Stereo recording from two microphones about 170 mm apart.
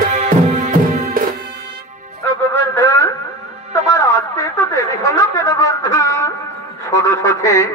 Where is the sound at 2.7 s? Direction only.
15° left (ahead or behind).